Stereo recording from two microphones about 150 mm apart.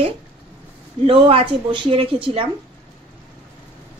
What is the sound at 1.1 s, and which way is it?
A woman's voice, 35° right (ahead or behind).